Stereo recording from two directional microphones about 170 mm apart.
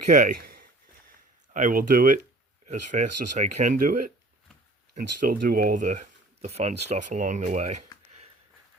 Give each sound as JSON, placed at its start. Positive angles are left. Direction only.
{"t": 0.1, "sound": "speech", "side_deg": -50}
{"t": 2.6, "sound": "speech", "side_deg": -45}